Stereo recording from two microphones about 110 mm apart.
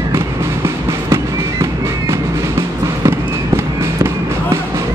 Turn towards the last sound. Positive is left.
turn(degrees=-25)  # may be behind; listen again after turning